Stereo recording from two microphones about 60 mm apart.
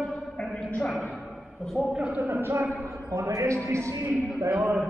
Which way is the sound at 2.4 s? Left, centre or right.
Right.